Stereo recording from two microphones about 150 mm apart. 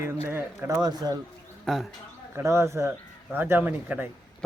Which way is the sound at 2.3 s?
15° right (ahead or behind).